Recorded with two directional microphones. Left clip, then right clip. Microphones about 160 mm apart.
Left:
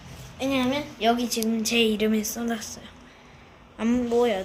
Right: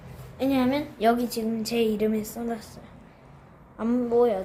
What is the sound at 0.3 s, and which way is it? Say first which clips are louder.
Speech: right 1 dB; 55° right (ahead or behind).